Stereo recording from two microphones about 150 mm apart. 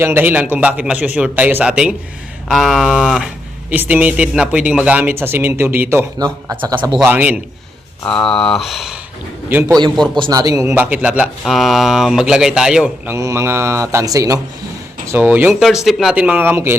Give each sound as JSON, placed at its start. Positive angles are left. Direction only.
{"t": 0.0, "sound": "speech", "side_deg": -15}
{"t": 6.2, "sound": "speech", "side_deg": -25}
{"t": 7.0, "sound": "speech", "side_deg": -10}
{"t": 8.0, "sound": "speech", "side_deg": 5}
{"t": 9.5, "sound": "speech", "side_deg": -15}
{"t": 10.2, "sound": "speech", "side_deg": -30}
{"t": 13.1, "sound": "speech", "side_deg": -20}
{"t": 15.6, "sound": "speech", "side_deg": 0}